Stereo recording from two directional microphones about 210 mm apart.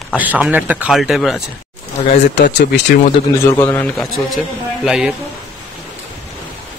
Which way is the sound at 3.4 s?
10° left (ahead or behind).